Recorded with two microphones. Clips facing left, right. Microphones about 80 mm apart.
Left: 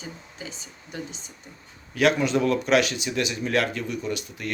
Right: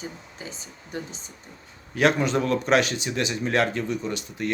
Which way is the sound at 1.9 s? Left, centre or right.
Right.